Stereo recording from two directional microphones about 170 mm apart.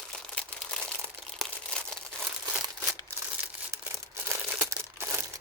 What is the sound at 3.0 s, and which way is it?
Crumpling, 10° right (ahead or behind).